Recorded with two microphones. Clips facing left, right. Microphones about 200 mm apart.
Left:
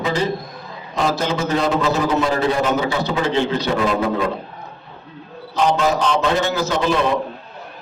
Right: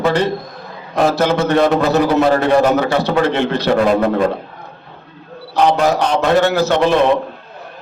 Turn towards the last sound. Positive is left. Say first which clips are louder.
# right 5 dB
turn(degrees=-65)  # may be behind; listen again after turning